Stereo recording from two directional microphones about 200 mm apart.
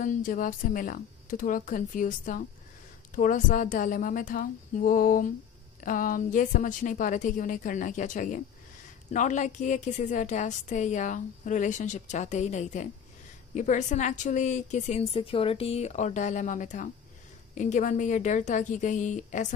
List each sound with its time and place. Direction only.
0.0 s a woman's voice: 40° left (ahead or behind)